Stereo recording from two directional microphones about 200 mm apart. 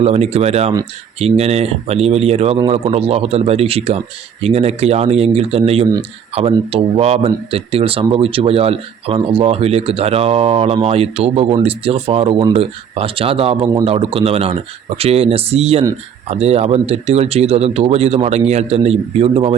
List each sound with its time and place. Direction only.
0.0 s speech: 30° right (ahead or behind)